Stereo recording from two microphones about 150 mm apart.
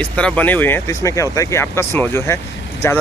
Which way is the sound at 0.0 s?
10° left (ahead or behind).